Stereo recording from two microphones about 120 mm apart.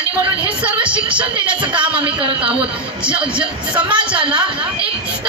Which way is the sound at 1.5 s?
45° right (ahead or behind).